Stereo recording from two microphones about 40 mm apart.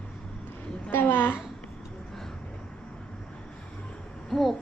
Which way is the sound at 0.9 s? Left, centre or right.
Left.